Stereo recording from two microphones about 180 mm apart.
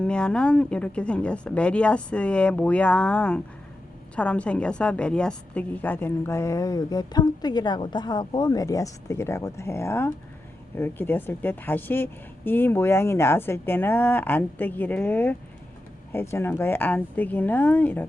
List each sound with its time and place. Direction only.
0.0 s a woman's voice: 5° left (ahead or behind)